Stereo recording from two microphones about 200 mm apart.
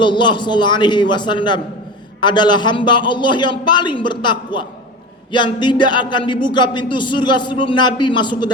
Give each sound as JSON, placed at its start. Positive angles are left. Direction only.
{"t": 0.0, "sound": "speech", "side_deg": 25}